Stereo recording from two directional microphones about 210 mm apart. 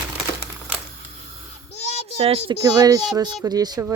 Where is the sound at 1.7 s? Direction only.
30° left (ahead or behind).